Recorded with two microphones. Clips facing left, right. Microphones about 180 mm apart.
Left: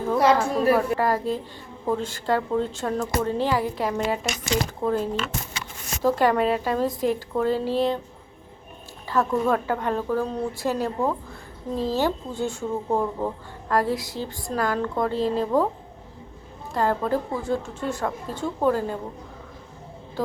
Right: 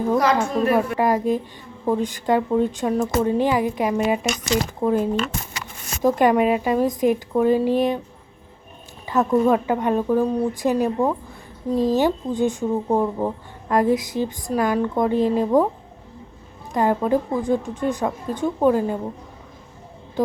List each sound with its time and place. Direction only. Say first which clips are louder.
0.2 s a woman's voice: even; 30° left (ahead or behind)
0.7 s speech: right 1 dB; 15° right (ahead or behind)
9.0 s speech: right 5 dB; 20° right (ahead or behind)
16.7 s speech: right 4 dB; 20° right (ahead or behind)
20.2 s speech: right 6 dB; 20° right (ahead or behind)